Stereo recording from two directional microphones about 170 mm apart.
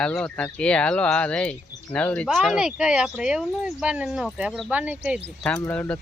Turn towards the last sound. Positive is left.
turn(degrees=5)  # may be behind; listen again after turning